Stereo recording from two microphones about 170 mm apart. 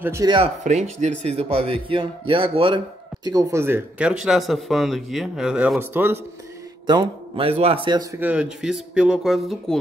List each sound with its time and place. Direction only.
0.0 s speech: 15° right (ahead or behind)
0.7 s speech: 40° right (ahead or behind)
3.3 s speech: 20° right (ahead or behind)
6.9 s a man's voice: 30° right (ahead or behind)
8.2 s speech: 5° right (ahead or behind)